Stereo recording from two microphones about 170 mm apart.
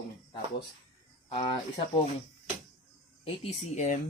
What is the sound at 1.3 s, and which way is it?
Speech, 30° left (ahead or behind).